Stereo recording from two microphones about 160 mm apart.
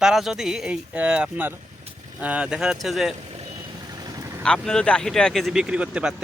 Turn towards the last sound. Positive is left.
turn(degrees=-5)  # may be behind; listen again after turning